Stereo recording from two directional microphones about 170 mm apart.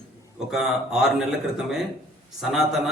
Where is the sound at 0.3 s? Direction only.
5° right (ahead or behind).